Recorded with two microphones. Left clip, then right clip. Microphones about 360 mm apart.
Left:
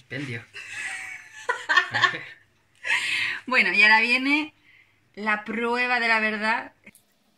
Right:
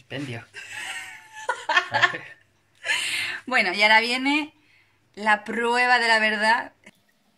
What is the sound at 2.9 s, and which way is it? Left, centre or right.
A woman's voice, right.